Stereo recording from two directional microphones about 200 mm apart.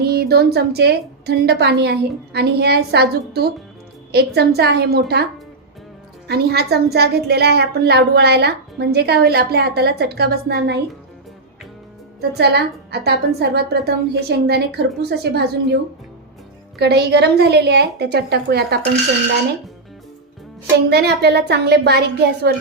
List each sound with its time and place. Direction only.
0.0 s a woman's voice: 50° right (ahead or behind)
12.3 s a woman's voice: 55° right (ahead or behind)
20.7 s a woman's voice: 55° right (ahead or behind)